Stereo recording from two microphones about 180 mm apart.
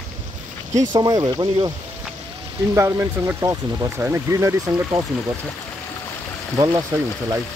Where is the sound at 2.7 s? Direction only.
15° right (ahead or behind).